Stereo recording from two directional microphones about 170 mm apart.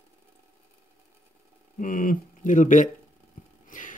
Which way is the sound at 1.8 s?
55° left (ahead or behind).